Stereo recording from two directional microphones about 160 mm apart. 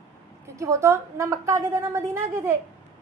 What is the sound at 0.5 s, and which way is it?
A woman's voice, 20° right (ahead or behind).